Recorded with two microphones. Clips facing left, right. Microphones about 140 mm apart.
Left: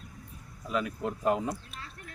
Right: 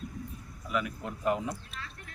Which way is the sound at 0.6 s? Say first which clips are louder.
Left 2 dB; 30° left (ahead or behind).